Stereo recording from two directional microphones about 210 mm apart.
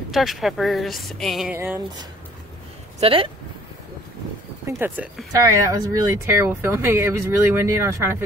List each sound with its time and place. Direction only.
0.1 s a woman's voice: centre (ahead or behind)
1.5 s speech: 10° right (ahead or behind)
3.0 s speech: 25° right (ahead or behind)
4.6 s speech: 10° right (ahead or behind)